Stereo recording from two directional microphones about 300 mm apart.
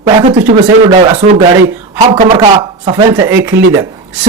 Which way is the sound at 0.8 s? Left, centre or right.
Centre.